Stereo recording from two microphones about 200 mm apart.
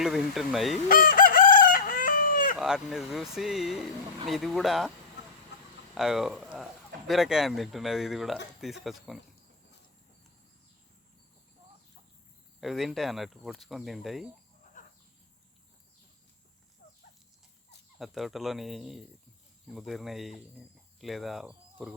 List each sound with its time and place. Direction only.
0.0 s speech: centre (ahead or behind)
0.9 s chicken: 45° left (ahead or behind)
2.6 s speech: 5° right (ahead or behind)
5.9 s speech: centre (ahead or behind)
12.5 s speech: centre (ahead or behind)
14.8 s a sound: 40° left (ahead or behind)
18.0 s speech: centre (ahead or behind)